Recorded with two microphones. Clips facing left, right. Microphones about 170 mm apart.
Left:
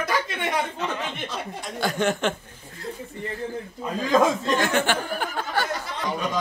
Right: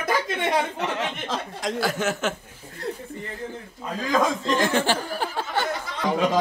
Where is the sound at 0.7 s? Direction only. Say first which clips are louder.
Right 2 dB; 90° right.